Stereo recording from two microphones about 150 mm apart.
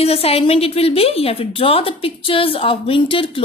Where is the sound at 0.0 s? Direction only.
40° left (ahead or behind).